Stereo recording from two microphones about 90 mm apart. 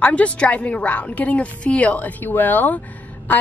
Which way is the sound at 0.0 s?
15° left (ahead or behind).